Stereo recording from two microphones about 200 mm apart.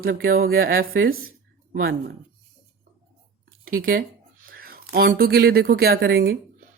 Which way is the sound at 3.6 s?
45° right (ahead or behind).